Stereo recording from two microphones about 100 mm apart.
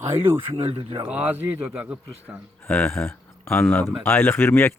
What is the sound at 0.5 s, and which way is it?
Speech, 70° right (ahead or behind).